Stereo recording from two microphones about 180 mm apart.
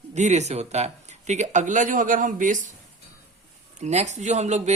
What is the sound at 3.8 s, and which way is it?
Speech, 40° right (ahead or behind).